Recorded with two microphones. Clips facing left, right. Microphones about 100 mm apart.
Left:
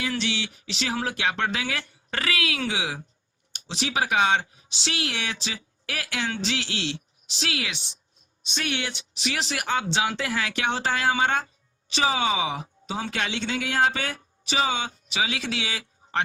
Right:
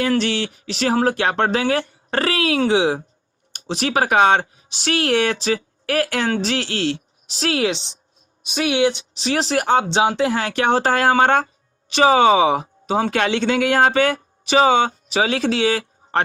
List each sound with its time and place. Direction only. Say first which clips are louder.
0.0 s speech: right 9 dB; 50° right (ahead or behind); by 3.0 s 35° right (ahead or behind)
3.5 s speech: right 7 dB; 50° right (ahead or behind)
8.7 s speech: right 13 dB; 20° right (ahead or behind)
9.1 s speech: right 9 dB; 35° right (ahead or behind); by 14.9 s 60° right (ahead or behind)
15.1 s speech: right 8 dB; 40° right (ahead or behind)